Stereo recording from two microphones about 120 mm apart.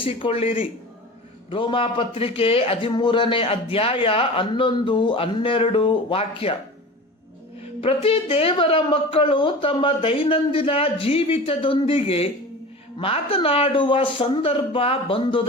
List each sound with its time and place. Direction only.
0.0 s speech: 50° left (ahead or behind)
2.9 s speech: 40° left (ahead or behind)
7.6 s speech: 55° left (ahead or behind)